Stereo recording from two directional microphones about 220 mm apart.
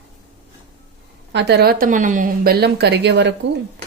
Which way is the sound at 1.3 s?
50° right (ahead or behind).